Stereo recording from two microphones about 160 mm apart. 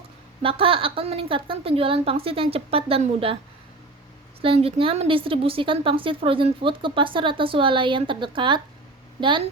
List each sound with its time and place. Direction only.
0.4 s a woman's voice: 35° right (ahead or behind)
4.4 s a woman's voice: 35° right (ahead or behind)